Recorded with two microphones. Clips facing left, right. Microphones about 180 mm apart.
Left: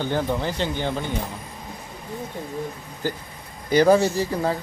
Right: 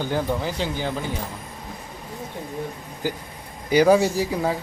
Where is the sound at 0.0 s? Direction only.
5° right (ahead or behind).